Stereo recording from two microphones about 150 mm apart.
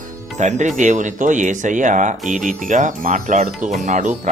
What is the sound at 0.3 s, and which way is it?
Speech, 50° right (ahead or behind).